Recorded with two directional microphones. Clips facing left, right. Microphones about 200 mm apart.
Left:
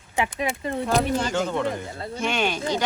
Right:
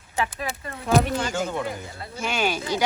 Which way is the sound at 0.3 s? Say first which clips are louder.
Left 5 dB; 20° left (ahead or behind).